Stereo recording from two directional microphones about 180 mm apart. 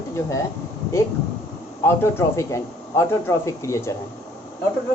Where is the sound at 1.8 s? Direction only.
15° left (ahead or behind).